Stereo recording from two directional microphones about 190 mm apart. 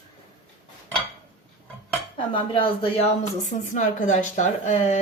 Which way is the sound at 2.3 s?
25° left (ahead or behind).